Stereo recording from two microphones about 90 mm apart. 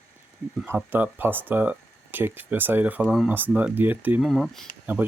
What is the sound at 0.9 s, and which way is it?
Speech, 20° right (ahead or behind).